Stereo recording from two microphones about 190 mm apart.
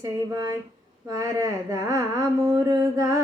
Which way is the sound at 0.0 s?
20° right (ahead or behind).